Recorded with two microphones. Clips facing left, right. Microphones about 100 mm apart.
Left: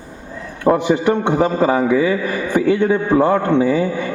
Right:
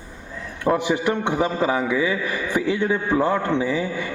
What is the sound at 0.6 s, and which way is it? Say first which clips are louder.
A man's voice: left 6 dB; 50° left (ahead or behind).